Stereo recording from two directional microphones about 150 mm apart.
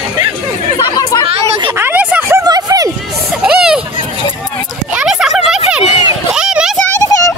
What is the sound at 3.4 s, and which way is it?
Hubbub, 5° right (ahead or behind).